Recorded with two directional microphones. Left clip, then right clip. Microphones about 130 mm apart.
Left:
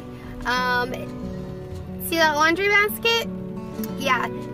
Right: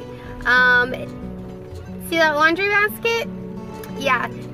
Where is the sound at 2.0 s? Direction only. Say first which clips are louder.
Right 2 dB; 15° left (ahead or behind).